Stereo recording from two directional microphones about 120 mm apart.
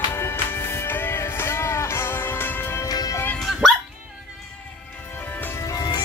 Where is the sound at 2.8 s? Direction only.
30° left (ahead or behind).